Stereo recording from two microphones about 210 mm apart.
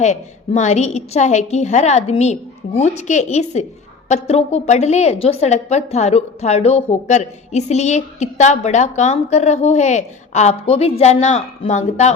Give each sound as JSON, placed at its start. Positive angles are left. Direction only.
{"t": 0.0, "sound": "a woman's voice", "side_deg": 35}